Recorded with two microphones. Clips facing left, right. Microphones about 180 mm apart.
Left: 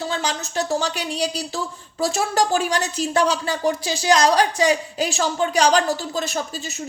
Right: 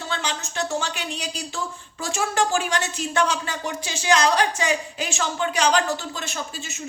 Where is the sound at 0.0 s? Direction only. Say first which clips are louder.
Left 4 dB; 35° left (ahead or behind).